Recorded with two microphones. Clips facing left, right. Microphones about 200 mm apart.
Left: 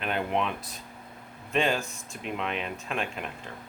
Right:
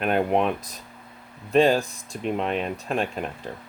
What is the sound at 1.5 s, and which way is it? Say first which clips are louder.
Speech: right 8 dB; 35° right (ahead or behind).